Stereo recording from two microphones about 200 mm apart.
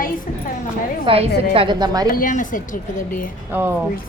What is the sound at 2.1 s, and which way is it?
Speech, 40° left (ahead or behind).